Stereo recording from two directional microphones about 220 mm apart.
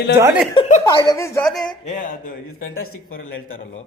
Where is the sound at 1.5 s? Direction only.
Centre (ahead or behind).